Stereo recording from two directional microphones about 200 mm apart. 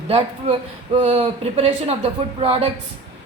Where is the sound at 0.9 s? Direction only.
30° right (ahead or behind).